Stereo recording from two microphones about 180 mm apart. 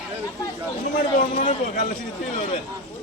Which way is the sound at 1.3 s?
30° left (ahead or behind).